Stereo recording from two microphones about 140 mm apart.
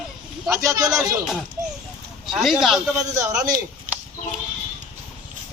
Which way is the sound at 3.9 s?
70° right (ahead or behind).